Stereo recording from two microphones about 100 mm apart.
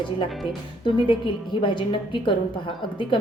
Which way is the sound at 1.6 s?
55° left (ahead or behind).